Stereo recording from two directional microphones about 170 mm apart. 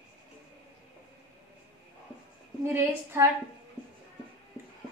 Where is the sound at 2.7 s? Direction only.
15° right (ahead or behind).